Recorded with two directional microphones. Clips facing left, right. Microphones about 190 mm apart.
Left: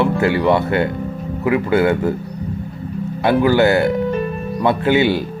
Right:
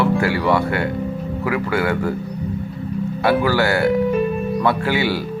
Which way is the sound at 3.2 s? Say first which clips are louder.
Left 4 dB; 20° left (ahead or behind).